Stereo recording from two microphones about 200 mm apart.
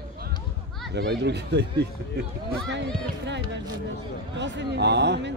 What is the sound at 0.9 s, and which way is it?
Speech, 55° right (ahead or behind).